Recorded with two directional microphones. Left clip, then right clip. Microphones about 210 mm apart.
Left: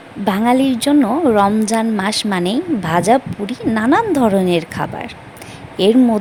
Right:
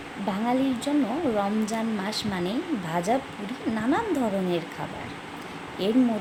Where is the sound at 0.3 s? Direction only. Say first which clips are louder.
Left 11 dB; 50° left (ahead or behind).